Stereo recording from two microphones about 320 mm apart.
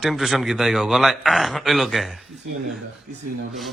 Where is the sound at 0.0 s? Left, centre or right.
Centre.